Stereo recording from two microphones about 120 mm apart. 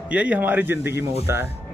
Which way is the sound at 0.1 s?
10° right (ahead or behind).